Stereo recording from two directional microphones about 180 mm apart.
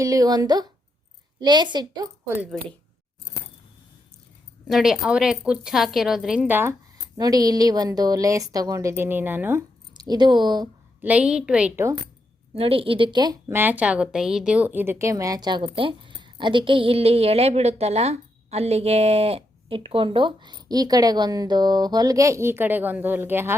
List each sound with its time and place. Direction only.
0.0 s a woman's voice: 20° right (ahead or behind)
2.2 s a woman's voice: 10° right (ahead or behind)
4.7 s a woman's voice: 5° right (ahead or behind)
9.9 s speech: 25° right (ahead or behind)
11.0 s a woman's voice: 5° right (ahead or behind)
12.5 s a woman's voice: 30° right (ahead or behind)
13.5 s a woman's voice: 10° right (ahead or behind)